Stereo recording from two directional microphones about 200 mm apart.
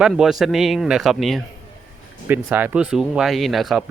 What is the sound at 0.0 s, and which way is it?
Speech, 5° right (ahead or behind).